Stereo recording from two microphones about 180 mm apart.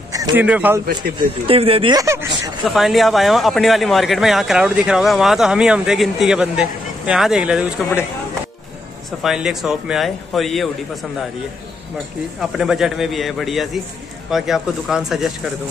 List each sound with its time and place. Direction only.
0.1 s speech: 15° right (ahead or behind)
1.1 s speech: 30° right (ahead or behind)
2.6 s speech: centre (ahead or behind)
9.2 s speech: centre (ahead or behind)
12.4 s speech: centre (ahead or behind)